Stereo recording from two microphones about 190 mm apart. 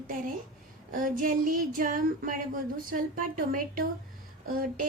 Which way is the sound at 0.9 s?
45° right (ahead or behind).